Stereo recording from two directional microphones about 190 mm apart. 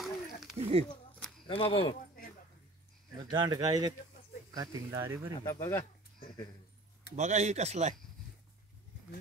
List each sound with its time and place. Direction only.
0.0 s a sound: centre (ahead or behind)
0.6 s a sound: 30° right (ahead or behind)
1.5 s speech: 30° left (ahead or behind)
3.3 s speech: 20° right (ahead or behind)
5.4 s speech: 15° left (ahead or behind)
7.2 s speech: 40° right (ahead or behind)